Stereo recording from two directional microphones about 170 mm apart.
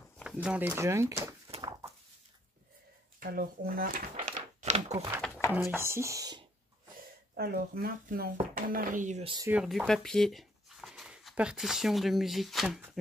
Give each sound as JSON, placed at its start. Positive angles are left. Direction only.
{"t": 0.2, "sound": "speech", "side_deg": -5}
{"t": 1.5, "sound": "a sound", "side_deg": -25}
{"t": 3.2, "sound": "speech", "side_deg": -60}
{"t": 5.2, "sound": "a sound", "side_deg": 10}
{"t": 5.5, "sound": "speech", "side_deg": -15}
{"t": 7.3, "sound": "speech", "side_deg": -65}
{"t": 9.2, "sound": "speech", "side_deg": -30}
{"t": 9.5, "sound": "speech", "side_deg": -5}